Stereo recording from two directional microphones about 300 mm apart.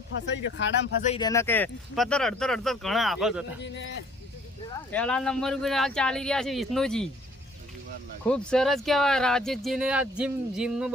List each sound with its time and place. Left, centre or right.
0.3 s speech: left
1.0 s speech: centre
3.6 s speech: left
4.9 s speech: centre
8.2 s speech: centre